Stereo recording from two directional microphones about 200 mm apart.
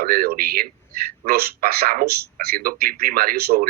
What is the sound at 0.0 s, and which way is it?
Speech, 50° right (ahead or behind).